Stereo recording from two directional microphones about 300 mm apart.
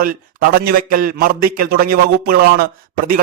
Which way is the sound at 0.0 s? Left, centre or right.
Right.